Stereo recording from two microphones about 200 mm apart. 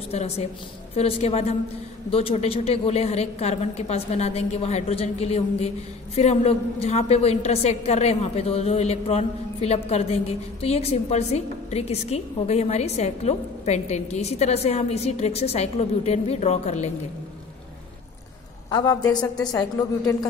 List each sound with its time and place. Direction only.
0.1 s a woman's voice: 30° left (ahead or behind)
18.7 s a woman's voice: 20° left (ahead or behind)